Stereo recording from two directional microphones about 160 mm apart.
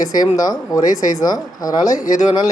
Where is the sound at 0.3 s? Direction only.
20° left (ahead or behind).